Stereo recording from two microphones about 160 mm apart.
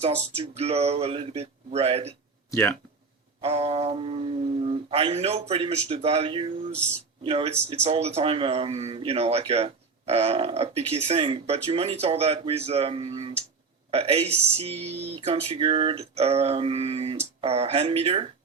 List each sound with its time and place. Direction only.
0.3 s a man's voice: 40° right (ahead or behind)
2.5 s speech: 15° left (ahead or behind)
3.4 s a man's voice: 40° right (ahead or behind)